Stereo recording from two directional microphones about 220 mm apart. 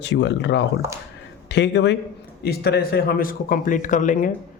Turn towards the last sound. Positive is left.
turn(degrees=35)  # may be behind; listen again after turning